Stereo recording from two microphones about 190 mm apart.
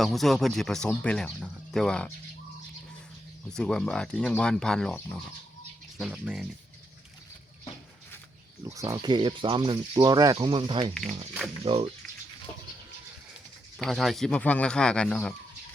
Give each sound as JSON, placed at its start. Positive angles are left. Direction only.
{"t": 0.0, "sound": "speech", "side_deg": 0}
{"t": 3.5, "sound": "speech", "side_deg": 5}
{"t": 6.0, "sound": "speech", "side_deg": -5}
{"t": 8.6, "sound": "speech", "side_deg": -15}
{"t": 12.5, "sound": "a sound", "side_deg": 40}
{"t": 13.7, "sound": "speech", "side_deg": 0}